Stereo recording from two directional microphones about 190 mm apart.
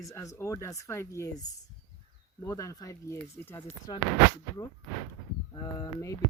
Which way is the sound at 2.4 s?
15° left (ahead or behind).